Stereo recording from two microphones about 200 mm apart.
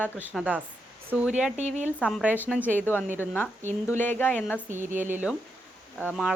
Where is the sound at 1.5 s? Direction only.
35° right (ahead or behind).